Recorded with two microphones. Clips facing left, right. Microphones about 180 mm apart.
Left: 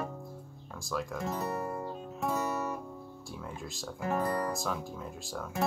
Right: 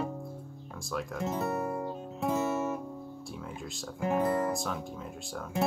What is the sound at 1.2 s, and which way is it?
Music, 25° right (ahead or behind).